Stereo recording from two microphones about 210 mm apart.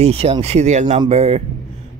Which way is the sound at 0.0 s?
30° right (ahead or behind).